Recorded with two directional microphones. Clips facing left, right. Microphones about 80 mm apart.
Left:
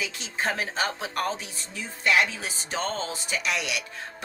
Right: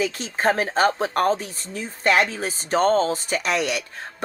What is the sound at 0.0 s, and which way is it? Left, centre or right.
Speech, right.